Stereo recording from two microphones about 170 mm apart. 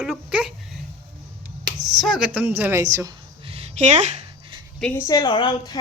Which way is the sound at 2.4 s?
10° right (ahead or behind).